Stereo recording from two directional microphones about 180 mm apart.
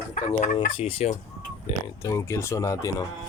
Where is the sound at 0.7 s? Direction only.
30° left (ahead or behind).